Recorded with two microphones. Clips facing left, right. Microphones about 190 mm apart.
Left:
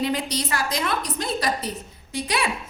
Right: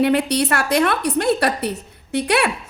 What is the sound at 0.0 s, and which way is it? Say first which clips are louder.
A woman's voice: right 8 dB; 65° right (ahead or behind).